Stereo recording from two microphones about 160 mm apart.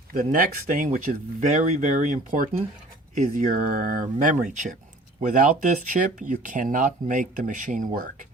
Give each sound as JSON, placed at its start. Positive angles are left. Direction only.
{"t": 0.1, "sound": "speech", "side_deg": -55}